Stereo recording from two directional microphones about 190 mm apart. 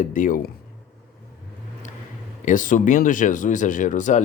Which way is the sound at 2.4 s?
45° left (ahead or behind).